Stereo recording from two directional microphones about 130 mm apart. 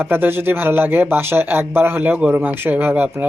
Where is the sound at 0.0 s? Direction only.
15° right (ahead or behind).